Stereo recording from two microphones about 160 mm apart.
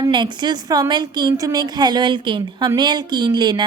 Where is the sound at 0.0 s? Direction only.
30° right (ahead or behind).